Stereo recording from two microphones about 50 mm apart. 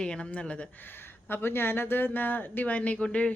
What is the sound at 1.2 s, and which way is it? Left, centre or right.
Speech, left.